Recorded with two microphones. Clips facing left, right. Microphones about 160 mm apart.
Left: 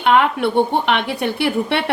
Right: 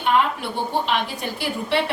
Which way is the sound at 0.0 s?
65° left (ahead or behind).